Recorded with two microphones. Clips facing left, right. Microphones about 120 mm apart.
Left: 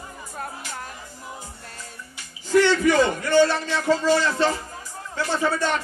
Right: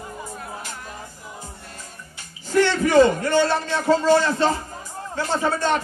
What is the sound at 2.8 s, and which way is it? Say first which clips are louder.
A man's voice: right 4 dB; 40° right (ahead or behind).